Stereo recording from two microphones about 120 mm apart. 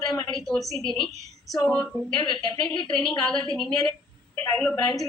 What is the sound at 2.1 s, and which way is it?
Speech, 40° left (ahead or behind).